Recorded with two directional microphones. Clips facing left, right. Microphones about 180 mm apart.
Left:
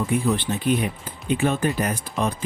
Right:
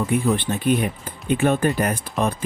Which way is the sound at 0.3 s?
55° right (ahead or behind).